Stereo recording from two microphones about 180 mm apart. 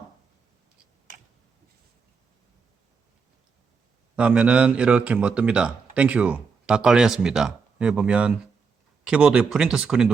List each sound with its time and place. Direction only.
4.1 s speech: 5° right (ahead or behind)